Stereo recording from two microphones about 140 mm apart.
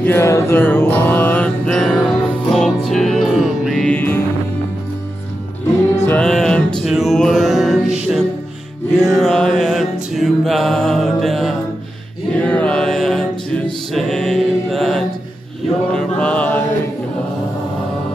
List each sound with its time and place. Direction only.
0.0 s mantra: 15° left (ahead or behind)
5.9 s music: 15° left (ahead or behind)
6.2 s music: 5° left (ahead or behind)
9.0 s mantra: centre (ahead or behind)